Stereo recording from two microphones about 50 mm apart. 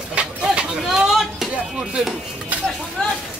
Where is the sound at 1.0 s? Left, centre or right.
Centre.